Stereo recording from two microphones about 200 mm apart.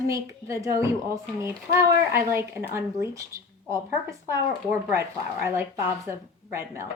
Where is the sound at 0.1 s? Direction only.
15° right (ahead or behind).